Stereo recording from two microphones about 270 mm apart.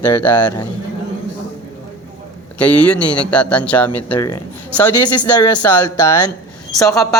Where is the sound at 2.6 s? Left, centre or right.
Centre.